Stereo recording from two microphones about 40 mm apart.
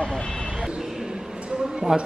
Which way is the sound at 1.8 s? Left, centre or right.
Right.